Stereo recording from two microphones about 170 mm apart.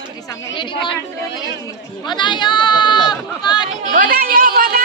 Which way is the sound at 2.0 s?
25° left (ahead or behind).